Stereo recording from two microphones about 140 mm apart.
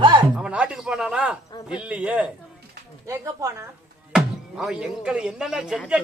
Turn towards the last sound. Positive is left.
turn(degrees=-5)  # may be behind; listen again after turning